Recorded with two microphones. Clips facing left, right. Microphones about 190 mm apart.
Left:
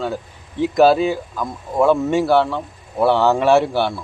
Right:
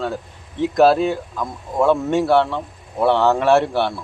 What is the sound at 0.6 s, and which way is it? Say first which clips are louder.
Speech: left 1 dB; centre (ahead or behind).